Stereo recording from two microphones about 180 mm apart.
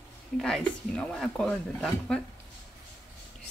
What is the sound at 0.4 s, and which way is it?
Speech, 5° left (ahead or behind).